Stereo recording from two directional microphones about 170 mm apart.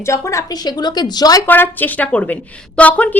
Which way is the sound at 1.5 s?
10° left (ahead or behind).